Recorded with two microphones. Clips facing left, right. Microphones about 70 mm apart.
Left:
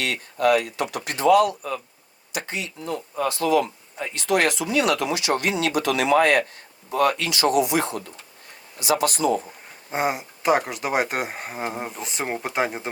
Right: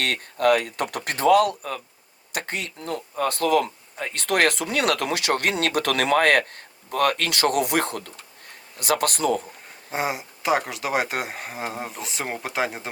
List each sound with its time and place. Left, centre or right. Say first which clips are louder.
0.0 s speech: even; right
9.9 s speech: left 2 dB; centre